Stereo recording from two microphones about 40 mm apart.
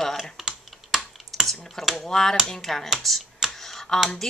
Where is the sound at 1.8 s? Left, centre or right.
Centre.